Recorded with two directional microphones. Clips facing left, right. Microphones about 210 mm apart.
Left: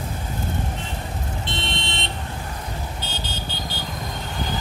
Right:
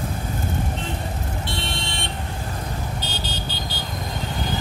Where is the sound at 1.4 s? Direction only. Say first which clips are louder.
Even; 20° left (ahead or behind).